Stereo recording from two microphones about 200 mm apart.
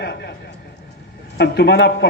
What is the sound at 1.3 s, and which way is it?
Speech, 55° left (ahead or behind).